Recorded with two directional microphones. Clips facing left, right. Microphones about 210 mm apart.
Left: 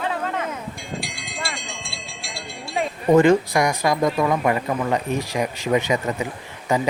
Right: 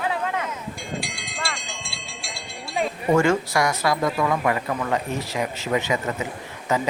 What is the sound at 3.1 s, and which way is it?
Speech, 15° left (ahead or behind).